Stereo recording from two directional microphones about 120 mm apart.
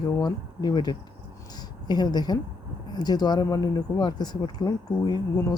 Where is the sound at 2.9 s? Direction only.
35° left (ahead or behind).